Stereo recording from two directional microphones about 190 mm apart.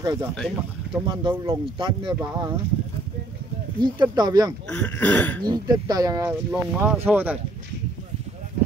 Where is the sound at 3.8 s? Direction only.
20° right (ahead or behind).